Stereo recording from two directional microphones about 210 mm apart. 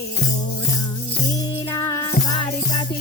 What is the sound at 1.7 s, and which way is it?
Music, 15° left (ahead or behind).